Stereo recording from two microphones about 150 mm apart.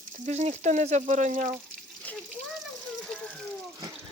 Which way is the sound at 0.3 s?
50° right (ahead or behind).